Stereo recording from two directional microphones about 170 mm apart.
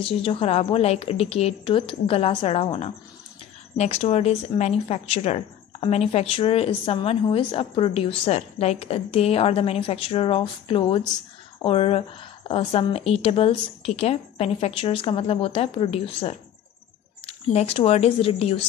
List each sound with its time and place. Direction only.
0.0 s speech: 30° left (ahead or behind)